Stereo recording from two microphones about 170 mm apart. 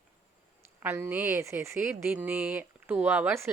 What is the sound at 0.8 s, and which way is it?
A woman's voice, 15° right (ahead or behind).